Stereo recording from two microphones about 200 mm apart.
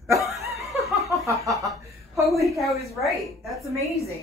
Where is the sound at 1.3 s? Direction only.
Centre (ahead or behind).